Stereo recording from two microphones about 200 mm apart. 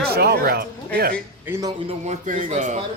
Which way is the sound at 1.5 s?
15° right (ahead or behind).